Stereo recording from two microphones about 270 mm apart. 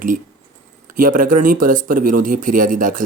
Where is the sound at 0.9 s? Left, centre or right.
Right.